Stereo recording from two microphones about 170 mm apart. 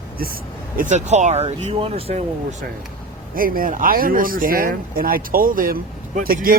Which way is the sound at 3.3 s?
55° right (ahead or behind).